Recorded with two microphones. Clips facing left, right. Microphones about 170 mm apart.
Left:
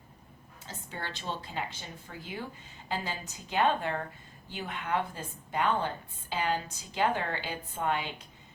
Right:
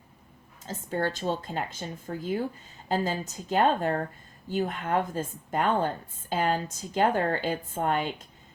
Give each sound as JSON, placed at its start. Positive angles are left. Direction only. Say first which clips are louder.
{"t": 0.7, "sound": "speech", "louder": "right 11 dB", "side_deg": -45}